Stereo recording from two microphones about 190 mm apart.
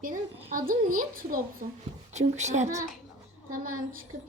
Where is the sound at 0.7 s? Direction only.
45° right (ahead or behind).